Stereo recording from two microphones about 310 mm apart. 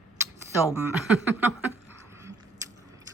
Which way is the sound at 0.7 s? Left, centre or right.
Centre.